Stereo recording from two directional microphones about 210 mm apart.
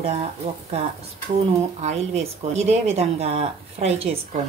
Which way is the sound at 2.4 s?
30° right (ahead or behind).